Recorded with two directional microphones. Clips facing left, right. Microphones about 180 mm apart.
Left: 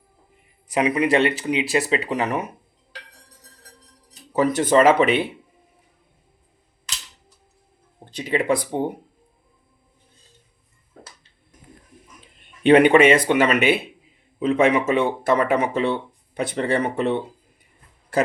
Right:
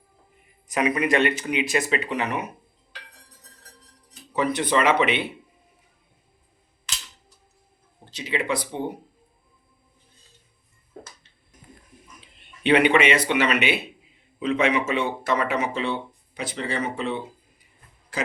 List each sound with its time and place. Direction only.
0.7 s speech: 30° left (ahead or behind)
4.1 s speech: 45° left (ahead or behind)
8.1 s speech: 50° left (ahead or behind)
12.2 s speech: 50° left (ahead or behind)